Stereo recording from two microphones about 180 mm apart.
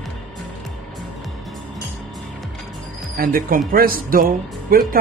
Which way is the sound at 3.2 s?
50° right (ahead or behind).